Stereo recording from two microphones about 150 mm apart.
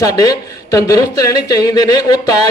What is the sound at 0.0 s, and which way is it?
Speech, 25° left (ahead or behind).